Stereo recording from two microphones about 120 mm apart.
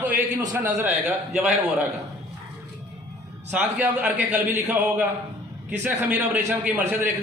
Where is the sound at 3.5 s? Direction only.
10° right (ahead or behind).